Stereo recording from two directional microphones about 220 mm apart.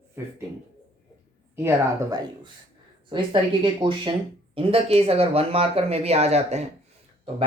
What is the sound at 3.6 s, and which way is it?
Speech, 20° right (ahead or behind).